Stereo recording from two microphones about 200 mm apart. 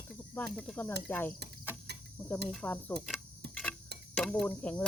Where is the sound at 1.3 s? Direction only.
55° right (ahead or behind).